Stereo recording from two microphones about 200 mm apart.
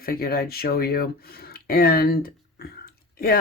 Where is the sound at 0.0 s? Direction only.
50° left (ahead or behind).